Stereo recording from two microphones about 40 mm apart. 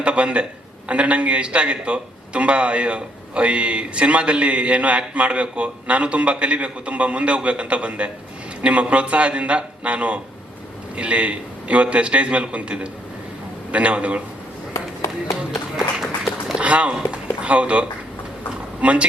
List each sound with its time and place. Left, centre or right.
0.0 s a man's voice: right
16.6 s a sound: right
18.8 s speech: right